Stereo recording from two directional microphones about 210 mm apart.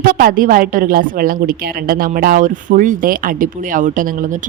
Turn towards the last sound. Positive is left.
turn(degrees=-40)  # may be behind; listen again after turning